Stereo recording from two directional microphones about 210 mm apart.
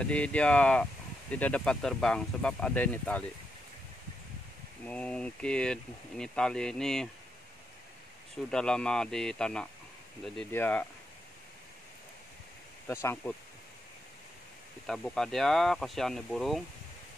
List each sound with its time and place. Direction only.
0.0 s speech: 5° left (ahead or behind)
4.8 s speech: 5° left (ahead or behind)
8.5 s speech: 5° left (ahead or behind)
12.8 s speech: 10° left (ahead or behind)
14.9 s speech: centre (ahead or behind)